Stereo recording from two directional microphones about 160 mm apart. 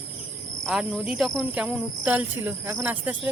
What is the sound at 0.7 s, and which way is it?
Speech, 5° right (ahead or behind).